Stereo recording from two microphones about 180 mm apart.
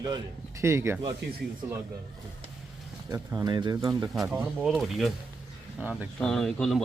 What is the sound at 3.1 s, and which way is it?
Speech, 20° right (ahead or behind).